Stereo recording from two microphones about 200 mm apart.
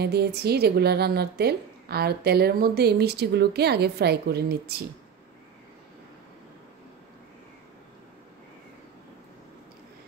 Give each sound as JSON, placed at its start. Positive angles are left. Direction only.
{"t": 0.0, "sound": "a woman's voice", "side_deg": -55}